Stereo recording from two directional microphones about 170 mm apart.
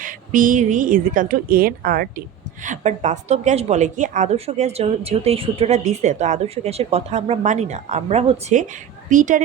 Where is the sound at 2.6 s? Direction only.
45° right (ahead or behind).